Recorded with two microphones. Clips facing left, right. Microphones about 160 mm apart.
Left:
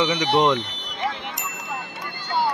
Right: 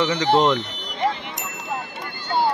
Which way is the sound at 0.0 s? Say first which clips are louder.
Right 1 dB; 15° left (ahead or behind).